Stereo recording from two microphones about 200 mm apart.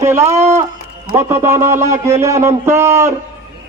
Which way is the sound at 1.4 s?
15° right (ahead or behind).